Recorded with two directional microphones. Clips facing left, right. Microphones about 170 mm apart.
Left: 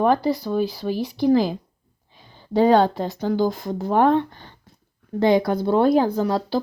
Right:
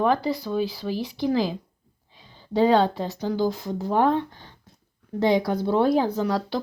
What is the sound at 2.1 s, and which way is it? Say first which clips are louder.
Speech: left 3 dB; 55° left (ahead or behind).